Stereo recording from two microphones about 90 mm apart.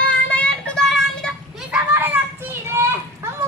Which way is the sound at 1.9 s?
20° right (ahead or behind).